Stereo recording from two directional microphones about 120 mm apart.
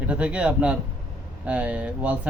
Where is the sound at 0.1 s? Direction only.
10° right (ahead or behind).